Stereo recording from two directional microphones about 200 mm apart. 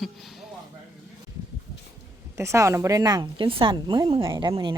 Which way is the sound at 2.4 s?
15° right (ahead or behind).